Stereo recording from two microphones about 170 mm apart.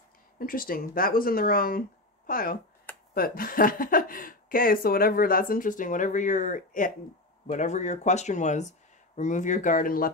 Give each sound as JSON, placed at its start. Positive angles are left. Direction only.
{"t": 0.4, "sound": "speech", "side_deg": 55}